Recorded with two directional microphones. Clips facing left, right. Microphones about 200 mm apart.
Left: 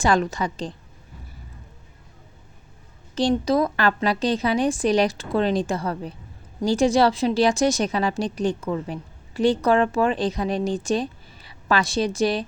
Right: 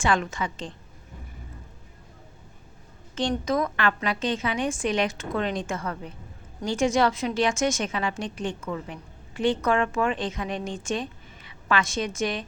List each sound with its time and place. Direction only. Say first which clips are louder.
0.0 s a woman's voice: left 4 dB; 35° left (ahead or behind)
3.2 s a woman's voice: left 5 dB; 35° left (ahead or behind)